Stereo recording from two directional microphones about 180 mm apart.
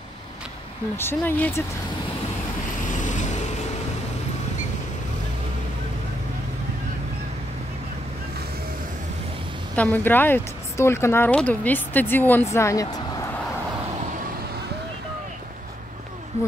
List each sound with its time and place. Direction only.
0.9 s speech: 10° left (ahead or behind)
3.0 s vehicle: 45° left (ahead or behind)
9.8 s speech: 10° left (ahead or behind)